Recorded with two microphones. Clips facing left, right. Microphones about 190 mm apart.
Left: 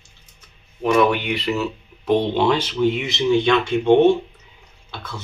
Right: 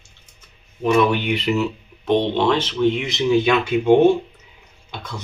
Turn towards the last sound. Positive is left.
turn(degrees=-15)  # may be behind; listen again after turning